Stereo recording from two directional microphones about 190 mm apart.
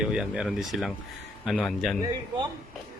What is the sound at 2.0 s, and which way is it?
Speech, 20° right (ahead or behind).